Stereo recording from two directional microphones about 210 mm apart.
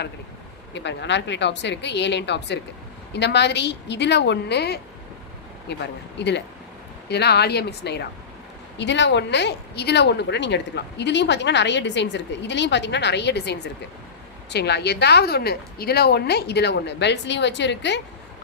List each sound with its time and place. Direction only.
0.7 s a woman's voice: 55° left (ahead or behind)